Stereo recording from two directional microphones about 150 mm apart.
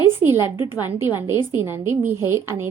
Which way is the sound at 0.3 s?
30° left (ahead or behind).